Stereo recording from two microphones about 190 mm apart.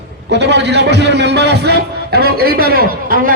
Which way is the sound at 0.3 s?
65° right (ahead or behind).